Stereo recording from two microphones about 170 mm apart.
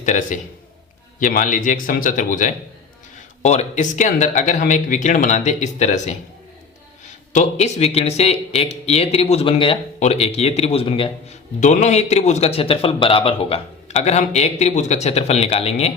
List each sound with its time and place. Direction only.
0.0 s speech: 50° left (ahead or behind)
3.4 s speech: 40° left (ahead or behind)
7.3 s a man's voice: 40° left (ahead or behind)
11.6 s a man's voice: 45° left (ahead or behind)